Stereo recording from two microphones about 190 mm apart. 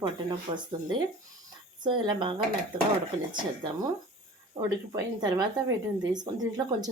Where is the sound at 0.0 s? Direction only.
25° right (ahead or behind).